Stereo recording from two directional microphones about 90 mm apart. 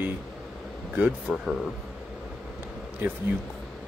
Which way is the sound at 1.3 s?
5° right (ahead or behind).